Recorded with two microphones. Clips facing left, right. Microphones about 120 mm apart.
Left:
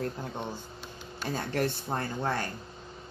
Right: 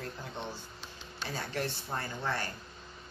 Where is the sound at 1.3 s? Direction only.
50° left (ahead or behind).